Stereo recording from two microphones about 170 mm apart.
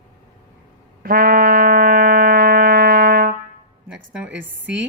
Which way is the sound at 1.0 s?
60° right (ahead or behind).